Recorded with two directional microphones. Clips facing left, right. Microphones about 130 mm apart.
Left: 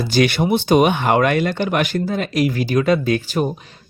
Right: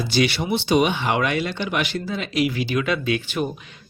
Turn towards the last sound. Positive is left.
turn(degrees=35)  # may be behind; listen again after turning